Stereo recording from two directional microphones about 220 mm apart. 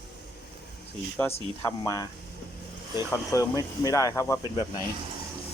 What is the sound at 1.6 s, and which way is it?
Speech, 15° left (ahead or behind).